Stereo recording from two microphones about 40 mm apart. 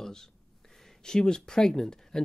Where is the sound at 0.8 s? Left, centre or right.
Centre.